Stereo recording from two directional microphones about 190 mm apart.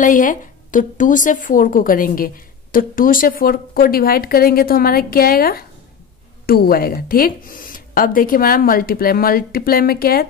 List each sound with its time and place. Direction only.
0.0 s speech: 45° left (ahead or behind)